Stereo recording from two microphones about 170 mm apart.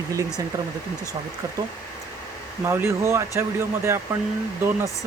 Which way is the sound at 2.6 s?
15° right (ahead or behind).